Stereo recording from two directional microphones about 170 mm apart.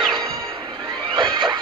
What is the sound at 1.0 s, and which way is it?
Neigh, 25° right (ahead or behind).